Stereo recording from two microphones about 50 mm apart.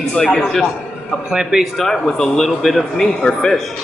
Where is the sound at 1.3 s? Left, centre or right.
Centre.